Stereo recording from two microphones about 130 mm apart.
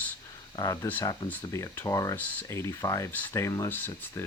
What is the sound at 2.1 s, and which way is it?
Speech, 15° left (ahead or behind).